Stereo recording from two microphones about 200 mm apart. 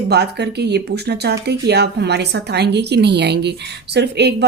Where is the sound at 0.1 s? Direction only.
55° right (ahead or behind).